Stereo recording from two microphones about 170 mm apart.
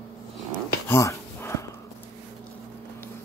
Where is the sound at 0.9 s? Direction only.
15° left (ahead or behind).